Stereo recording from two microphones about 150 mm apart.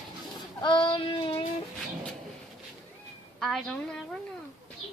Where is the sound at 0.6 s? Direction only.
30° left (ahead or behind).